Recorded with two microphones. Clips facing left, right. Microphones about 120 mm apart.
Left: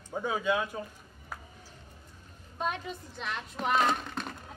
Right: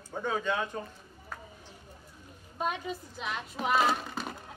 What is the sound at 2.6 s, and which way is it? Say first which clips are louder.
Speech: right 1 dB; 5° right (ahead or behind).